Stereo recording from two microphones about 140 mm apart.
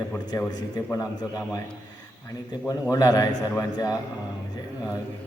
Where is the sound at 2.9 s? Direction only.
25° left (ahead or behind).